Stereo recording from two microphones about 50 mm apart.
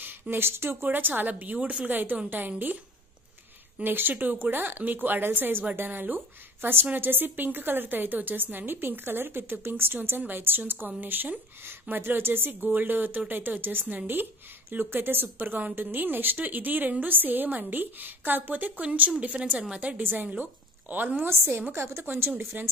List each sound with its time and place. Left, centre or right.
0.0 s speech: right
0.8 s a woman's voice: right
3.8 s a woman's voice: right
20.0 s a woman's voice: right